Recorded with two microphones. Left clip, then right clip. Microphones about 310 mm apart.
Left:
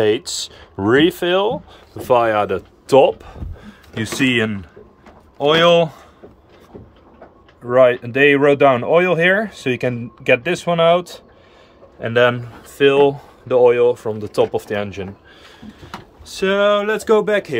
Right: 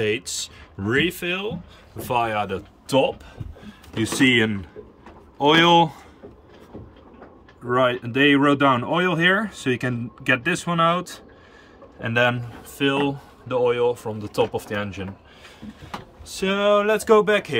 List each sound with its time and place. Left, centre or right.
0.0 s speech: centre
7.7 s speech: centre